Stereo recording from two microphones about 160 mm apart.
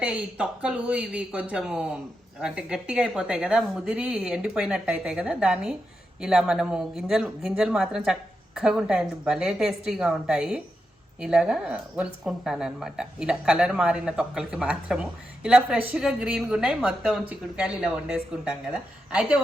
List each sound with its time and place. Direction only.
0.0 s speech: 10° right (ahead or behind)